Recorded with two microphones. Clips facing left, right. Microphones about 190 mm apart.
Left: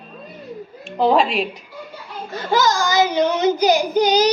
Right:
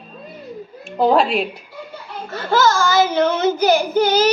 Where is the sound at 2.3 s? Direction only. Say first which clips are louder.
Right 2 dB; 15° left (ahead or behind).